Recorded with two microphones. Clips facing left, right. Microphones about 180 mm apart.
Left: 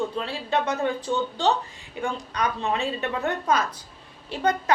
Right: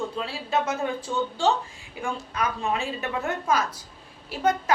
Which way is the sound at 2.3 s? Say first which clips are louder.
Even; 5° right (ahead or behind).